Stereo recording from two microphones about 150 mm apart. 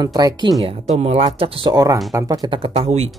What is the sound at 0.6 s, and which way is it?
Speech, 45° right (ahead or behind).